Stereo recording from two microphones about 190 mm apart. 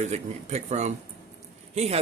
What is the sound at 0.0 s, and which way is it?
Speech, 35° right (ahead or behind).